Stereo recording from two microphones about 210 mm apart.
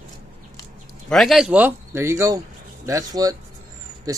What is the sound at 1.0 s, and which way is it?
A man's voice, centre (ahead or behind).